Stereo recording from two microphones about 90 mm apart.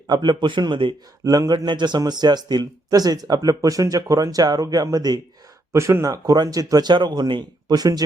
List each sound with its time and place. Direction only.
0.1 s a man's voice: 55° right (ahead or behind)
1.2 s speech: 40° right (ahead or behind)
5.7 s speech: 30° right (ahead or behind)